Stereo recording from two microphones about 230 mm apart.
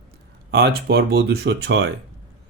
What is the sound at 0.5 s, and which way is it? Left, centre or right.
Speech, right.